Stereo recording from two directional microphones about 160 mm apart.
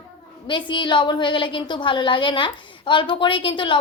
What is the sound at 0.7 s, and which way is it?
A woman's voice, 30° left (ahead or behind).